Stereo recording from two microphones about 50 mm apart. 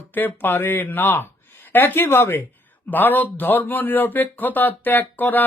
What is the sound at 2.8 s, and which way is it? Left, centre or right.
Speech, left.